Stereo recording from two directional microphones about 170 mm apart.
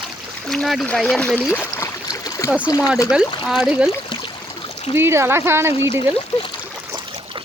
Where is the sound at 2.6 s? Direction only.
20° left (ahead or behind).